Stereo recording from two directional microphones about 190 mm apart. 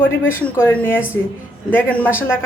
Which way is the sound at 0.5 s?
10° left (ahead or behind).